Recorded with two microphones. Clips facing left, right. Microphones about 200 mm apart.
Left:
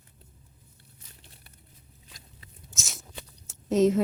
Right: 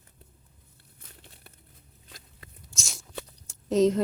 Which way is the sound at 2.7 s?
Centre (ahead or behind).